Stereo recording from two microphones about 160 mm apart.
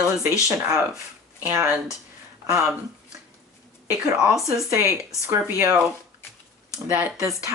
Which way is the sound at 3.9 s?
5° right (ahead or behind).